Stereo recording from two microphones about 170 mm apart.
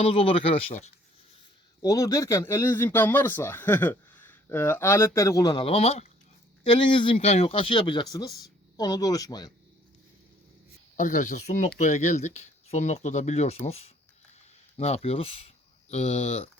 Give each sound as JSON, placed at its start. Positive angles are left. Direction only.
{"t": 0.0, "sound": "speech", "side_deg": 30}
{"t": 1.8, "sound": "speech", "side_deg": 20}
{"t": 5.6, "sound": "speech", "side_deg": 35}
{"t": 10.9, "sound": "speech", "side_deg": 50}